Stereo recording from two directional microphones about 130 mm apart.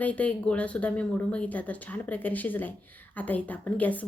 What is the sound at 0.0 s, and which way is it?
Speech, 10° left (ahead or behind).